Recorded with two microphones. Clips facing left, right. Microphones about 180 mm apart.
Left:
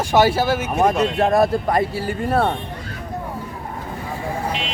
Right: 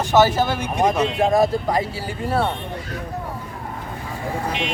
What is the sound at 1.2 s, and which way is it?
Speech, 60° left (ahead or behind).